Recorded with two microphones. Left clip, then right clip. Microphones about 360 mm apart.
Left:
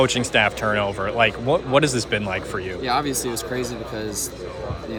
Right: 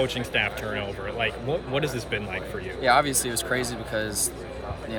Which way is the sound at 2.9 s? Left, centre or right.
Right.